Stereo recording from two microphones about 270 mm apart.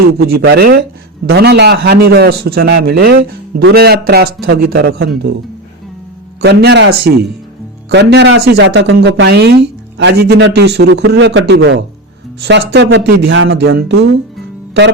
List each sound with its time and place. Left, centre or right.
0.3 s a man's voice: right
6.4 s a man's voice: right